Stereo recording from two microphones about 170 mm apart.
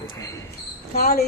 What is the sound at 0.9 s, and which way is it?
Speech, 65° left (ahead or behind).